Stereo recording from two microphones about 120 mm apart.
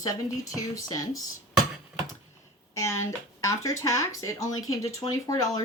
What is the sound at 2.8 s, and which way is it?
Speech, 25° left (ahead or behind).